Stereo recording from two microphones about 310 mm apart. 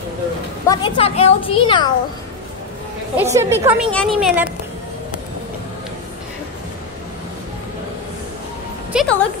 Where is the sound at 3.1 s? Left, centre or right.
Centre.